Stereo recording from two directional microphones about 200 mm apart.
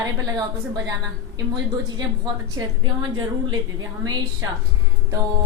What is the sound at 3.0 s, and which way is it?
A woman's voice, 20° right (ahead or behind).